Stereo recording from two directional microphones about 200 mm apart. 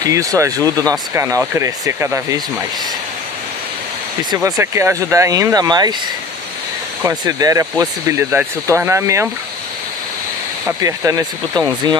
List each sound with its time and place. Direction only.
0.0 s speech: 15° right (ahead or behind)
4.3 s speech: 15° right (ahead or behind)
7.0 s speech: 15° right (ahead or behind)
10.8 s speech: 15° right (ahead or behind)